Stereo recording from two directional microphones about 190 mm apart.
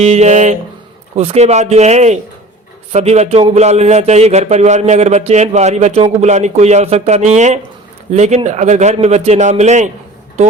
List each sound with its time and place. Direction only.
0.0 s a man's voice: 35° right (ahead or behind)